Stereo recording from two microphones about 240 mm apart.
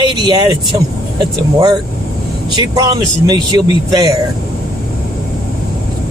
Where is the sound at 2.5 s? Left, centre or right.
Centre.